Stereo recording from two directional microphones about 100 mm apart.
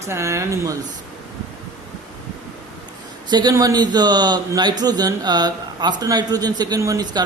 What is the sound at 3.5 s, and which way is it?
A man's voice, 35° right (ahead or behind).